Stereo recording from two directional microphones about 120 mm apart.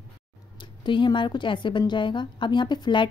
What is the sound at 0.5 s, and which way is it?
Speech, 45° left (ahead or behind).